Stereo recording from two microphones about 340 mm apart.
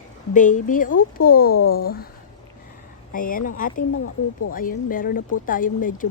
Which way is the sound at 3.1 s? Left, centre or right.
Left.